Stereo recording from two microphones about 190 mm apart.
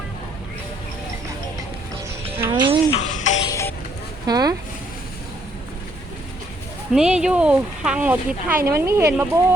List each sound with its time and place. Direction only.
2.5 s speech: 25° right (ahead or behind)
2.9 s music: 35° left (ahead or behind)
3.4 s music: 15° left (ahead or behind)
4.3 s a sound: 20° right (ahead or behind)
6.9 s speech: 5° right (ahead or behind)